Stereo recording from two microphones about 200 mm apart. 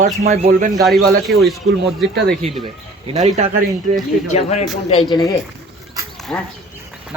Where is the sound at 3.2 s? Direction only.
35° right (ahead or behind).